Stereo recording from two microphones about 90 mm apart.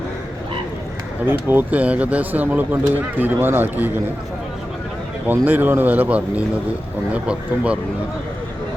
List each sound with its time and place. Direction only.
1.2 s speech: 25° right (ahead or behind)
5.2 s speech: 20° right (ahead or behind)